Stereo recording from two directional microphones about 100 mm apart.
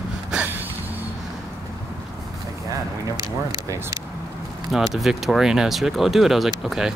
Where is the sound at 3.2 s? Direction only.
40° right (ahead or behind).